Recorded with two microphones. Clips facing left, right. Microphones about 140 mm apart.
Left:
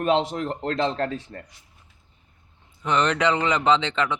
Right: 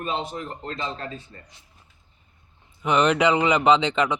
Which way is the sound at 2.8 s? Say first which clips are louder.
Right 2 dB; 10° right (ahead or behind).